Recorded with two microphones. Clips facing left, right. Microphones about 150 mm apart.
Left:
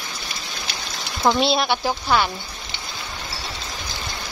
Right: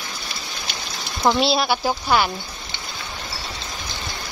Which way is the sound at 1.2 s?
Centre (ahead or behind).